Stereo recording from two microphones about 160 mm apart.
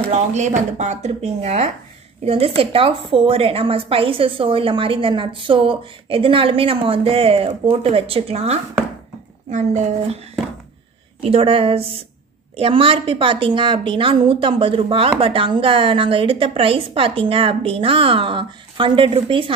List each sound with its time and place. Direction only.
0.1 s a woman's voice: 45° right (ahead or behind)
11.1 s a woman's voice: 35° right (ahead or behind)